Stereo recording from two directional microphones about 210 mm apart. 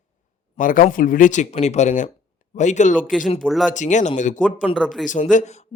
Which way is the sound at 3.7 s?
35° left (ahead or behind).